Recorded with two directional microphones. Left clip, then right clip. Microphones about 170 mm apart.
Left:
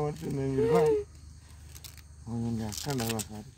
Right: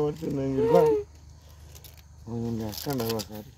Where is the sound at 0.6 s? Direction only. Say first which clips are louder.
Right 4 dB; 20° left (ahead or behind).